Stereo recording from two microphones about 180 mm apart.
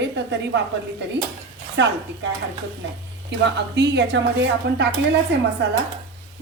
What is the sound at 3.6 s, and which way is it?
A woman's voice, 75° right (ahead or behind).